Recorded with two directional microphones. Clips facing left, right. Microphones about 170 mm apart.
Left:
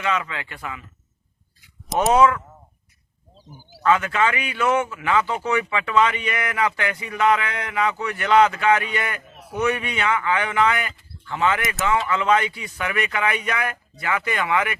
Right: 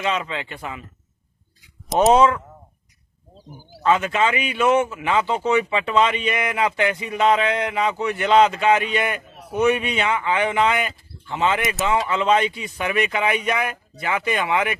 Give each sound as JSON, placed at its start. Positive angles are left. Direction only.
{"t": 0.0, "sound": "speech", "side_deg": -20}
{"t": 2.1, "sound": "speech", "side_deg": -25}
{"t": 3.8, "sound": "speech", "side_deg": -20}